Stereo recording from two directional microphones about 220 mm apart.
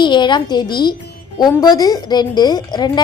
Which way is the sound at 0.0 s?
20° left (ahead or behind).